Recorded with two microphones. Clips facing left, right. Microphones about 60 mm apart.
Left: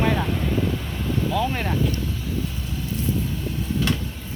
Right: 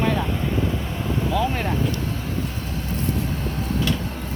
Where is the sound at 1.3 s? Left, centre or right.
Centre.